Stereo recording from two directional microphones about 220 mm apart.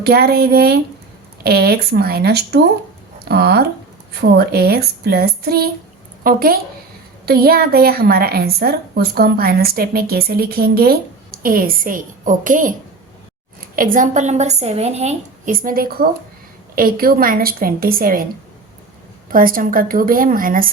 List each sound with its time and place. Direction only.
0.0 s a woman's voice: 45° right (ahead or behind)
19.3 s a woman's voice: 40° right (ahead or behind)